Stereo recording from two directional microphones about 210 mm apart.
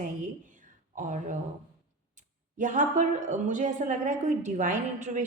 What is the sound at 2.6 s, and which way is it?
A woman's voice, 40° right (ahead or behind).